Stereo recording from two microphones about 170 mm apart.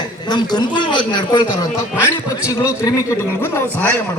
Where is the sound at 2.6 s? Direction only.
15° left (ahead or behind).